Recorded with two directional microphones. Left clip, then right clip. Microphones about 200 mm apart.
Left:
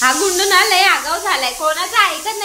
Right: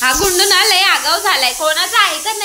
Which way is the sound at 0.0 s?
5° left (ahead or behind).